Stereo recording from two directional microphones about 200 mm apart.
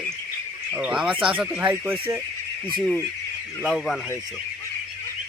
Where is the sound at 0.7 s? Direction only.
5° right (ahead or behind).